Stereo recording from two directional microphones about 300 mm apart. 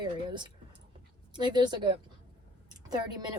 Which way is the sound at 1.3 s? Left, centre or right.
Centre.